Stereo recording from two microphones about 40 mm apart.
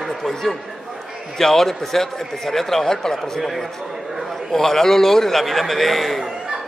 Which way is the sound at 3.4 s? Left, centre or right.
Centre.